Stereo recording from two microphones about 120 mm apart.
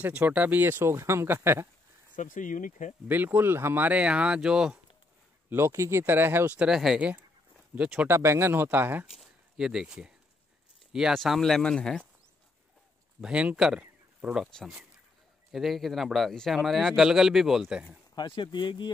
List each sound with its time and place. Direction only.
0.0 s speech: 15° right (ahead or behind)
2.1 s speech: 90° left
3.1 s speech: 15° right (ahead or behind)
5.5 s speech: 20° right (ahead or behind)
6.5 s speech: 5° right (ahead or behind)
8.1 s speech: 20° right (ahead or behind)
9.1 s speech: 5° right (ahead or behind)
13.2 s speech: 10° right (ahead or behind)
18.1 s speech: 40° left (ahead or behind)